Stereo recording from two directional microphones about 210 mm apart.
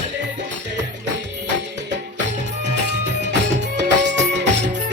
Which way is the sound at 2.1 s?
55° right (ahead or behind).